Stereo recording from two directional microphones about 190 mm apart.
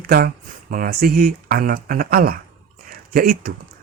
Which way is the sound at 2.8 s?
50° right (ahead or behind).